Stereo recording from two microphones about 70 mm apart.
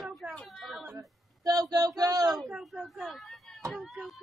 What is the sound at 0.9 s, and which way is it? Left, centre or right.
Speech, right.